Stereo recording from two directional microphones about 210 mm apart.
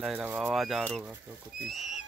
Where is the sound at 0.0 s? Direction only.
5° right (ahead or behind).